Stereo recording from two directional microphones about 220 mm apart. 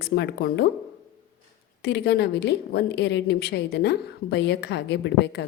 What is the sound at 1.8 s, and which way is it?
A woman's voice, 50° left (ahead or behind).